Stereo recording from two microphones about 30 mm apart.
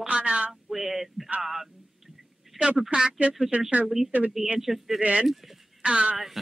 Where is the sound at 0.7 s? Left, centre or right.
Centre.